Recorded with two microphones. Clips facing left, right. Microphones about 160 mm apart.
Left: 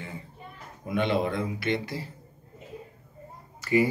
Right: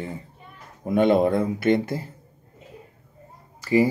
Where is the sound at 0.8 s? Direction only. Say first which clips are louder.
Right 8 dB; 45° right (ahead or behind).